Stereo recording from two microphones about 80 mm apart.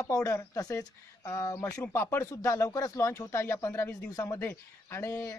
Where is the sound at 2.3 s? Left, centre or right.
Left.